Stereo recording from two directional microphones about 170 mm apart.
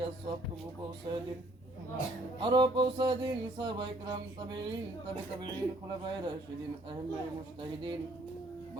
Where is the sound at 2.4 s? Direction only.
25° right (ahead or behind).